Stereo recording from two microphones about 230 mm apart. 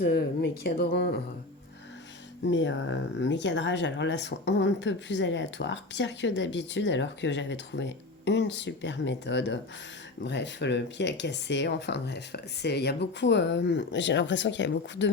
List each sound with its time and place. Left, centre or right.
0.0 s speech: left
2.5 s speech: left